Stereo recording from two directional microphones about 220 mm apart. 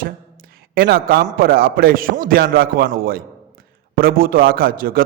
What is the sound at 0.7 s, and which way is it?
A man's voice, 45° right (ahead or behind).